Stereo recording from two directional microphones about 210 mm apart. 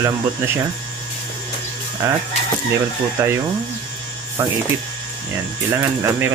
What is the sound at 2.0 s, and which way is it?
Speech, 15° right (ahead or behind).